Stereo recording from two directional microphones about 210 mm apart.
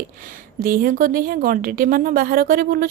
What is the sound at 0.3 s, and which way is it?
Speech, 40° right (ahead or behind).